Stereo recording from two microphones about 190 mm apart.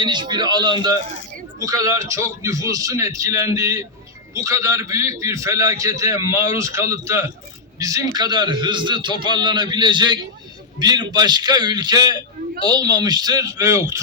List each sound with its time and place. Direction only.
0.0 s a man's voice: 25° right (ahead or behind)